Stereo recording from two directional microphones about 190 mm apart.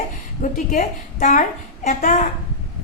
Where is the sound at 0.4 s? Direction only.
45° left (ahead or behind).